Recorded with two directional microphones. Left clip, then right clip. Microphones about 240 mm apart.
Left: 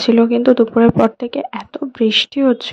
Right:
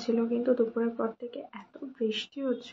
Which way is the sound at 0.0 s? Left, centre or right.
Left.